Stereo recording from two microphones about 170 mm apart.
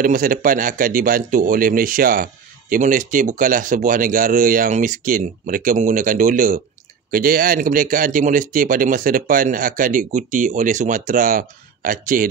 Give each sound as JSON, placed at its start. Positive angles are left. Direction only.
{"t": 0.0, "sound": "speech", "side_deg": -55}